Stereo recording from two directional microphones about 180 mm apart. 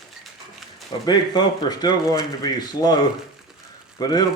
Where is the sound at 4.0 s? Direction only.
20° left (ahead or behind).